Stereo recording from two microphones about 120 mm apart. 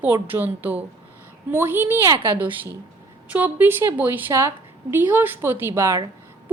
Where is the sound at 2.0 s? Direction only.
45° right (ahead or behind).